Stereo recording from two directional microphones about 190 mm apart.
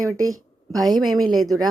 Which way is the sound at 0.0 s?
15° right (ahead or behind).